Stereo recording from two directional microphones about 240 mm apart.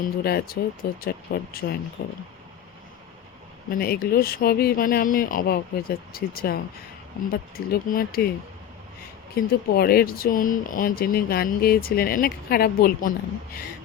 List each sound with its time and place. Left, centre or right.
0.2 s speech: left
3.7 s speech: left
9.3 s speech: left